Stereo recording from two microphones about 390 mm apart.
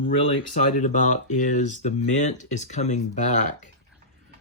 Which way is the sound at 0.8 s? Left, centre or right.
Centre.